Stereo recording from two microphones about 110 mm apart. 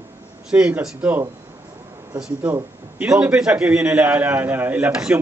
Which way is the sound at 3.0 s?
10° right (ahead or behind).